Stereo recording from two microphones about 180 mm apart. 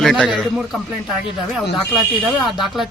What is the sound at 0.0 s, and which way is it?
Speech, centre (ahead or behind).